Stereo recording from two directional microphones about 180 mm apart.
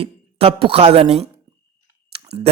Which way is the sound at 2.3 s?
65° right (ahead or behind).